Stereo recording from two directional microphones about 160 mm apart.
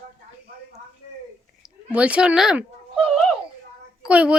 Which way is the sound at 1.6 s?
10° right (ahead or behind).